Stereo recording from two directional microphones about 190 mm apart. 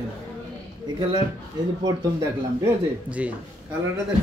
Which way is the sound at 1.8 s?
20° right (ahead or behind).